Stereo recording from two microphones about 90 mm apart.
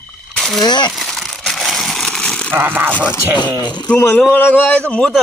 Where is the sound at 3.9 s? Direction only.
25° left (ahead or behind).